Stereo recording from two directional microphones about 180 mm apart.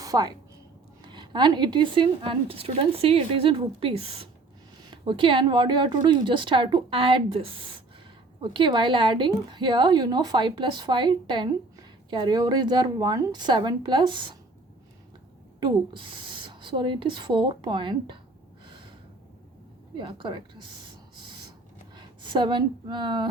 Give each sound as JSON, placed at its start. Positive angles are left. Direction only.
{"t": 0.0, "sound": "a woman's voice", "side_deg": -20}
{"t": 15.6, "sound": "speech", "side_deg": -25}
{"t": 20.0, "sound": "speech", "side_deg": -25}
{"t": 21.2, "sound": "a sound", "side_deg": -25}
{"t": 21.9, "sound": "speech", "side_deg": -25}